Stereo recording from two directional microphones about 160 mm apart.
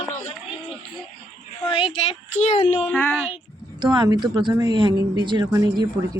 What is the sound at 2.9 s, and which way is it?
Speech, 10° left (ahead or behind).